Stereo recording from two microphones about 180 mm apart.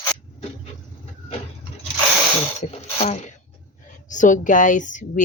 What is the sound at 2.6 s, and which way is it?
A woman's voice, 40° left (ahead or behind).